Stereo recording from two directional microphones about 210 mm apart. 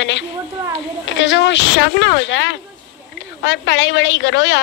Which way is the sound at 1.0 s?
60° left (ahead or behind).